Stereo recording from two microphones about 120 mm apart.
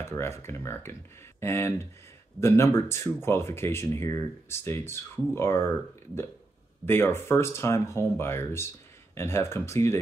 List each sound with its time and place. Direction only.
0.0 s speech: 20° left (ahead or behind)
6.9 s speech: 20° left (ahead or behind)